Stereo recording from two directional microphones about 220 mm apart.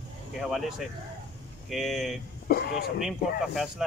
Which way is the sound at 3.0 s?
Centre (ahead or behind).